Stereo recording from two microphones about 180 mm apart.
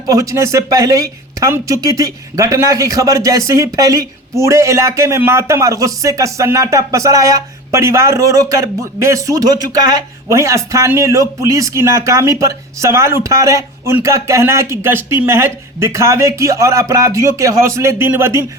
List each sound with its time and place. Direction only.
0.1 s speech: 20° right (ahead or behind)